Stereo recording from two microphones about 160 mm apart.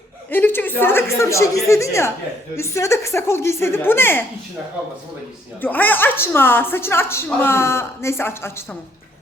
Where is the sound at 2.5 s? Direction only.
20° left (ahead or behind).